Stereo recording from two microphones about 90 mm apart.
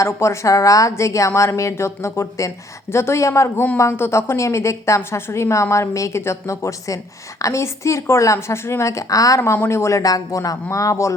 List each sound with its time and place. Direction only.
0.0 s a woman's voice: 35° left (ahead or behind)